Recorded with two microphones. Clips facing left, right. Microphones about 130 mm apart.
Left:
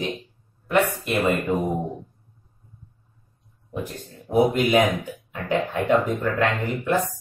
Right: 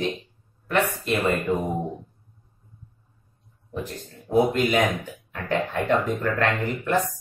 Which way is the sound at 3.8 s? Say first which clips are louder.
Left 1 dB; 15° left (ahead or behind).